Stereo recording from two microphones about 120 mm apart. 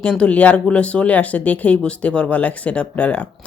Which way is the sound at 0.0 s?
10° left (ahead or behind).